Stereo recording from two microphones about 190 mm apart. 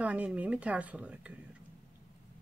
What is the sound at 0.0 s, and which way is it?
Speech, 5° right (ahead or behind).